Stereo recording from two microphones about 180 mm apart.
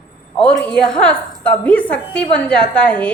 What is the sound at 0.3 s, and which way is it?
A woman's voice, 5° left (ahead or behind).